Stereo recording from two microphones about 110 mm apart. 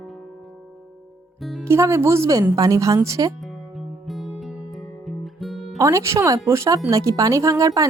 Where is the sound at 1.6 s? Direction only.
25° right (ahead or behind).